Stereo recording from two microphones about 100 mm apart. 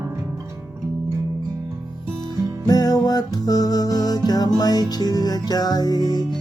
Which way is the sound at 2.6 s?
40° left (ahead or behind).